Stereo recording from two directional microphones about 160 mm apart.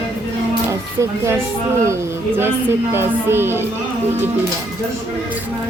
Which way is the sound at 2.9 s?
15° right (ahead or behind).